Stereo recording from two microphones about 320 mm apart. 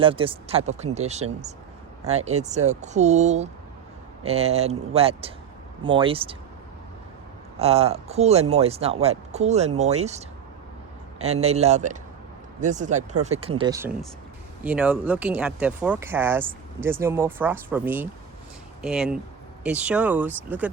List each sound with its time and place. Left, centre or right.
0.0 s speech: centre
7.6 s speech: centre